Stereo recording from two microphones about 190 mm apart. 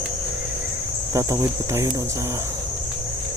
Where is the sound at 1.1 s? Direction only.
15° right (ahead or behind).